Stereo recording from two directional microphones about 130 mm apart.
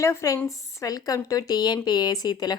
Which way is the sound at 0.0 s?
25° left (ahead or behind).